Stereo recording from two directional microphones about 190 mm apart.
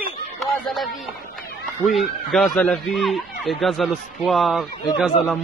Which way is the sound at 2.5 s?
Centre (ahead or behind).